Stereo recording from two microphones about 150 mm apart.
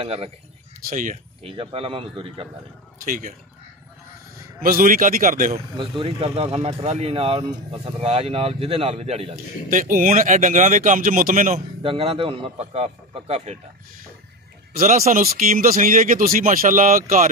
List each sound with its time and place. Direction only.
0.0 s speech: 40° right (ahead or behind)
0.8 s speech: 60° right (ahead or behind)
1.4 s speech: 35° right (ahead or behind)
3.1 s speech: 60° right (ahead or behind)
4.6 s speech: 65° right (ahead or behind)
5.8 s speech: 35° right (ahead or behind)
9.7 s speech: 60° right (ahead or behind)
11.8 s speech: 40° right (ahead or behind)
14.8 s speech: 65° right (ahead or behind)